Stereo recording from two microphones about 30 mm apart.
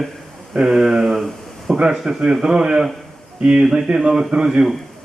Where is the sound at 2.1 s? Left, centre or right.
Right.